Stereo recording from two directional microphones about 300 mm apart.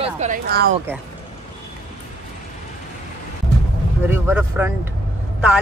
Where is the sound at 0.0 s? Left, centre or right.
Right.